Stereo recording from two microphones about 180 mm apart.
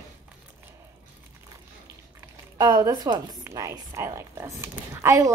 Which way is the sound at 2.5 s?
20° right (ahead or behind).